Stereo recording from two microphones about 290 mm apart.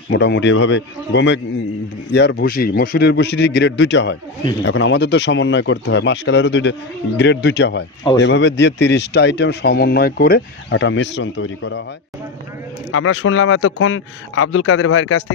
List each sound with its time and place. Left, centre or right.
0.1 s speech: left
12.9 s speech: left